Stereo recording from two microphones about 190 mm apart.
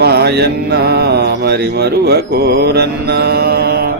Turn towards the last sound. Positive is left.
turn(degrees=-55)  # may be behind; listen again after turning